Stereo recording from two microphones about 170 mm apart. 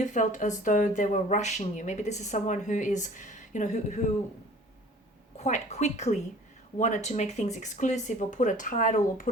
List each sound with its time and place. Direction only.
0.0 s speech: 45° left (ahead or behind)
5.4 s a woman's voice: 40° left (ahead or behind)